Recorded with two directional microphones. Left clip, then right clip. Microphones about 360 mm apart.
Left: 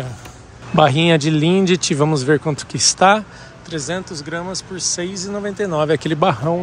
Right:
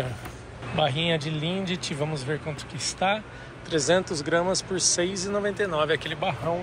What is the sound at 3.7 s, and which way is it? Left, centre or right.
Speech, centre.